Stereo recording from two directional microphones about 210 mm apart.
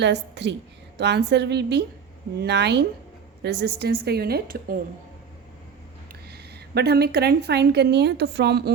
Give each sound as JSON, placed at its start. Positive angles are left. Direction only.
{"t": 0.0, "sound": "a woman's voice", "side_deg": -55}
{"t": 6.2, "sound": "a woman's voice", "side_deg": -50}